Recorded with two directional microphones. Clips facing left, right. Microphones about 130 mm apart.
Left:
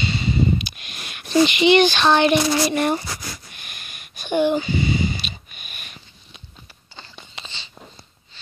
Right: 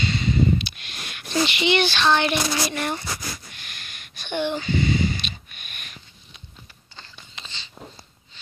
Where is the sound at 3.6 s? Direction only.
15° left (ahead or behind).